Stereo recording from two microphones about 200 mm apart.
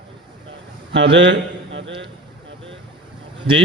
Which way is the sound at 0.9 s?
65° right (ahead or behind).